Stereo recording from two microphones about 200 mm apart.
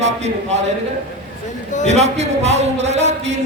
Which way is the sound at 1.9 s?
35° right (ahead or behind).